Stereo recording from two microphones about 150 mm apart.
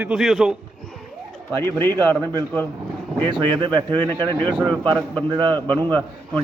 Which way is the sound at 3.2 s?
30° right (ahead or behind).